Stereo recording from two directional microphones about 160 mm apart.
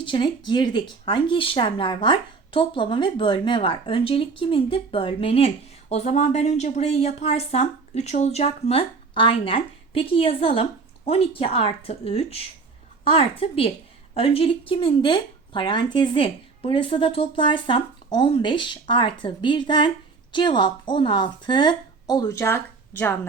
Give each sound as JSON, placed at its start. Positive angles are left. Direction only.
{"t": 0.0, "sound": "a woman's voice", "side_deg": 30}